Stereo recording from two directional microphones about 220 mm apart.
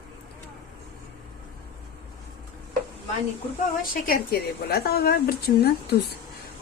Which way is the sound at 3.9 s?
40° left (ahead or behind).